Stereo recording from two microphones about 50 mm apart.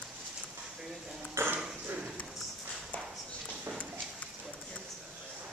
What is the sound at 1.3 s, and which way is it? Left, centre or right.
Burping, right.